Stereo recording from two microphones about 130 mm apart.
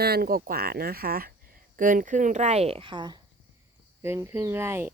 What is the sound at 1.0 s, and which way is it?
Speech, 90° right.